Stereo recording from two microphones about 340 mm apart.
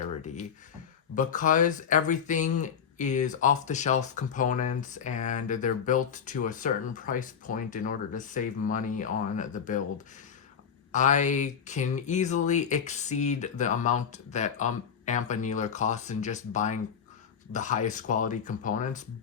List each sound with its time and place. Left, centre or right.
1.1 s speech: left
10.9 s speech: left